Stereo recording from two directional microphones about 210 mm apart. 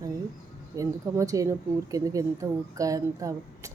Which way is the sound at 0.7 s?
15° right (ahead or behind).